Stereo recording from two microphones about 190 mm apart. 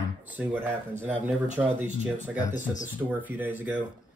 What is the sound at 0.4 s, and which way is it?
Speech, 10° right (ahead or behind).